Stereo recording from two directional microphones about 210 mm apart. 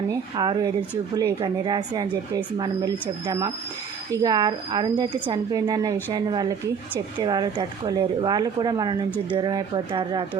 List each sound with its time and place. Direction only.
0.1 s speech: 20° right (ahead or behind)